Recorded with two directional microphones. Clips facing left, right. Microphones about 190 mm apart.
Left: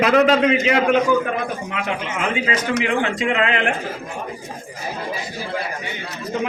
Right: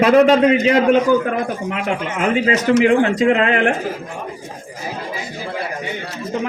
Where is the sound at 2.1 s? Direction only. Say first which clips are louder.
Right 8 dB; 50° right (ahead or behind).